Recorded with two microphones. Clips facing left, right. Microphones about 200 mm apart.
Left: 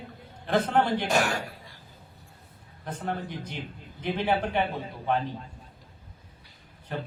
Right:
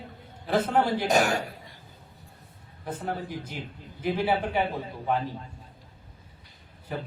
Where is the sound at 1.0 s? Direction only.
20° right (ahead or behind).